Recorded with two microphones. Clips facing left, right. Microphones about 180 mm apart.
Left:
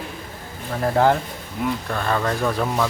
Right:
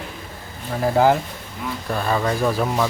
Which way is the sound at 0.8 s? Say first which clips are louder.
Right 1 dB; 5° right (ahead or behind).